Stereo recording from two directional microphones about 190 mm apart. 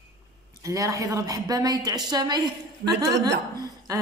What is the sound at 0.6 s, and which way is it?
A woman's voice, 15° right (ahead or behind).